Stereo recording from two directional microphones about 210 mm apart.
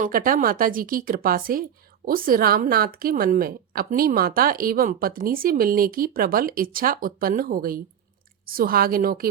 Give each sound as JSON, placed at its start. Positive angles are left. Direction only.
{"t": 0.0, "sound": "a woman's voice", "side_deg": -40}